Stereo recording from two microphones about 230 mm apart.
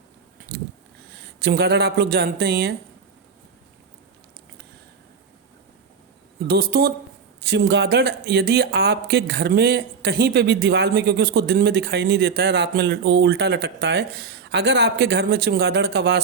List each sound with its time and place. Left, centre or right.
1.4 s speech: right
6.5 s speech: right